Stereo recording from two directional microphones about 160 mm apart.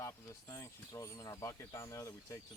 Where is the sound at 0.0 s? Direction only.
20° left (ahead or behind).